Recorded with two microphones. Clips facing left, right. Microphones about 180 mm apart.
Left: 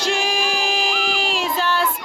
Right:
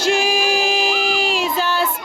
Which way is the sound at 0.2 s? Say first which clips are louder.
Right 4 dB; 5° right (ahead or behind).